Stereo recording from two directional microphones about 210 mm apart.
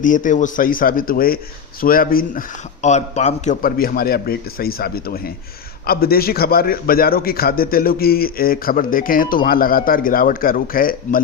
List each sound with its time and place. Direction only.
0.0 s a man's voice: 40° left (ahead or behind)